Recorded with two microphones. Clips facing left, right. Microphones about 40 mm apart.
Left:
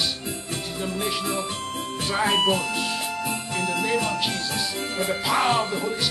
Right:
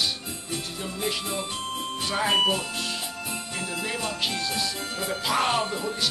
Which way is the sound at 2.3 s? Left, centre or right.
Left.